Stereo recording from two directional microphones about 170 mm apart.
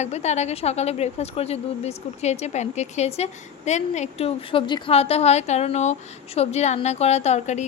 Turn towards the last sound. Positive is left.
turn(degrees=45)  # may be behind; listen again after turning